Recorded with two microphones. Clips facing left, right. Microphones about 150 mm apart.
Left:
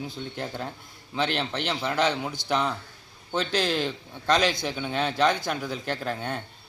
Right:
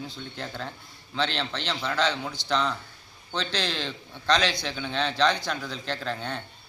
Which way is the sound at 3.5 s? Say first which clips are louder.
Left 5 dB; 50° left (ahead or behind).